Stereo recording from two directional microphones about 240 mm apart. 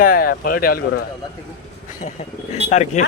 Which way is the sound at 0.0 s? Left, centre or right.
Left.